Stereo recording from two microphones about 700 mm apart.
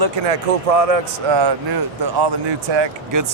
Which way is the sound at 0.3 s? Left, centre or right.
Right.